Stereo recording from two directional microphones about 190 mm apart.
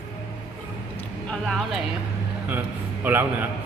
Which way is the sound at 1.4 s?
Centre (ahead or behind).